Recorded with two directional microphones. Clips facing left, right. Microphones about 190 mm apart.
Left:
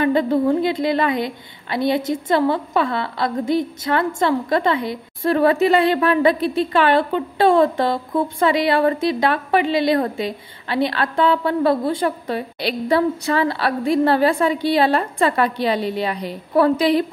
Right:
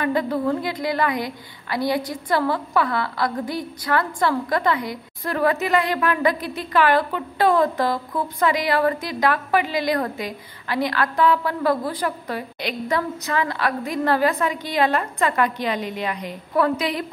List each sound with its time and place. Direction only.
0.0 s a woman's voice: 25° left (ahead or behind)